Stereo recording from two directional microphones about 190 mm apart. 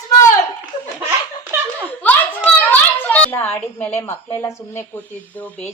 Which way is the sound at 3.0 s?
10° left (ahead or behind).